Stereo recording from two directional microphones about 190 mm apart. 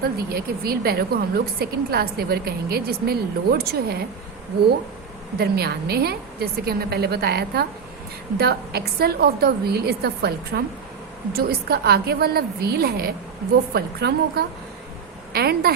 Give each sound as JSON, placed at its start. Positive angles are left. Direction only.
{"t": 0.0, "sound": "a woman's voice", "side_deg": -55}
{"t": 5.4, "sound": "a woman's voice", "side_deg": -55}